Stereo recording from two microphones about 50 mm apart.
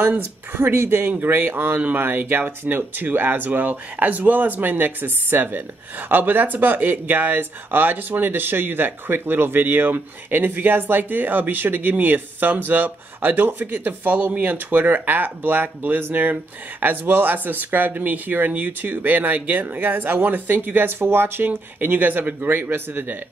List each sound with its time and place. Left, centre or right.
0.5 s speech: right